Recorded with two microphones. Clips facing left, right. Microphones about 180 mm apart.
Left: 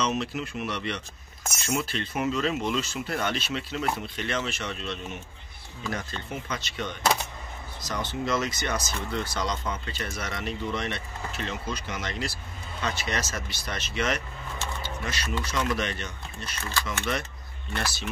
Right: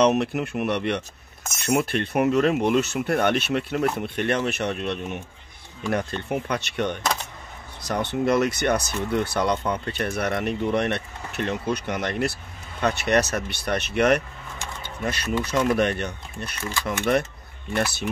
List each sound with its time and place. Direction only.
0.0 s speech: 60° right (ahead or behind)